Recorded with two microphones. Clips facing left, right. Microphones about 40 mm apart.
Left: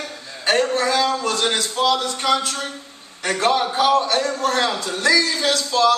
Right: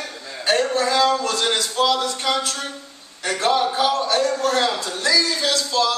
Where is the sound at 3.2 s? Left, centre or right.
Left.